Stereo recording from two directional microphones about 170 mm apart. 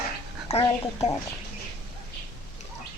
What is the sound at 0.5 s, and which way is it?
Speech, 35° left (ahead or behind).